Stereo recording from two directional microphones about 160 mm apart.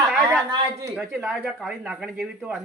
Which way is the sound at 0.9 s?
Centre (ahead or behind).